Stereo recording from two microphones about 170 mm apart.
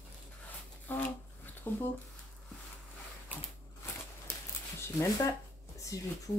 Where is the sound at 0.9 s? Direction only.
10° left (ahead or behind).